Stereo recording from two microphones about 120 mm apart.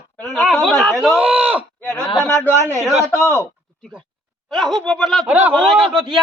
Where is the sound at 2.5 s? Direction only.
25° right (ahead or behind).